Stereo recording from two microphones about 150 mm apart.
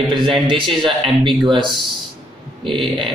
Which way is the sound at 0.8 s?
35° right (ahead or behind).